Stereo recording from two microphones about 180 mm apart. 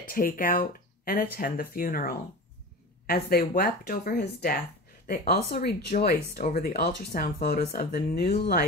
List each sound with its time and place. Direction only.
0.0 s speech: 50° left (ahead or behind)